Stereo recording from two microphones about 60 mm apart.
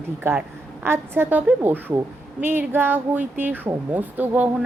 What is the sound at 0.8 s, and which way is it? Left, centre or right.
Speech, right.